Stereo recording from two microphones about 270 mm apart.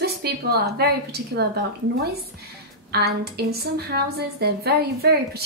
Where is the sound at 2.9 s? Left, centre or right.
Right.